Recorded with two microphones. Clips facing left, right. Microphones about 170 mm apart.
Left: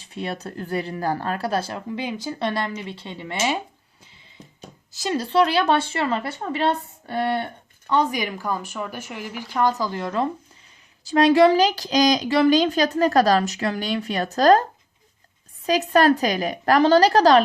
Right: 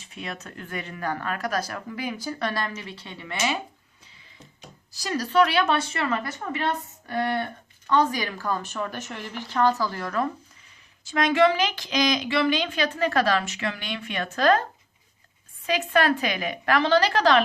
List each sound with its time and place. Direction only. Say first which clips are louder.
0.0 s speech: left 7 dB; 35° left (ahead or behind)
4.9 s speech: left 4 dB; 25° left (ahead or behind)
7.9 s speech: left 1 dB; 15° left (ahead or behind)
11.0 s a woman's voice: left 5 dB; 35° left (ahead or behind)